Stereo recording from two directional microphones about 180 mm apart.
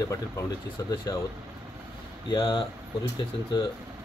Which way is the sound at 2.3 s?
25° left (ahead or behind).